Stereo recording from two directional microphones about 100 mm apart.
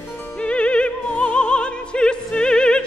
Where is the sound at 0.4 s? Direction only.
10° left (ahead or behind).